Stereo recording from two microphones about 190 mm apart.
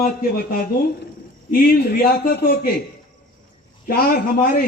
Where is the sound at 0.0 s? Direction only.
50° left (ahead or behind).